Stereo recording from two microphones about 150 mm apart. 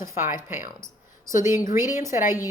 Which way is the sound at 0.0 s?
20° right (ahead or behind).